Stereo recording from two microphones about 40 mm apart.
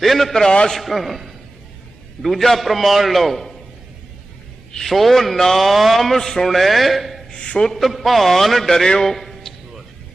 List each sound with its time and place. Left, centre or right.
0.0 s a man's voice: centre
0.4 s a man's voice: left
0.7 s a man's voice: centre
4.9 s a man's voice: centre
7.3 s a sound: left
7.6 s a man's voice: centre
9.0 s a sound: centre